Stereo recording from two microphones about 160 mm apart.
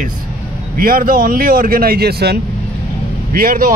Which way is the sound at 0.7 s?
65° right (ahead or behind).